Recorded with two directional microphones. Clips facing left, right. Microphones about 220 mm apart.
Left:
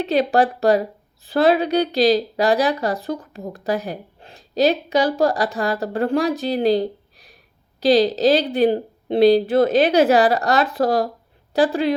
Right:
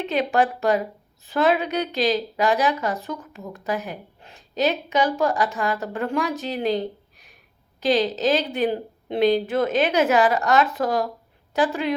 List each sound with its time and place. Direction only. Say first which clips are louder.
0.0 s a woman's voice: left 4 dB; 35° left (ahead or behind)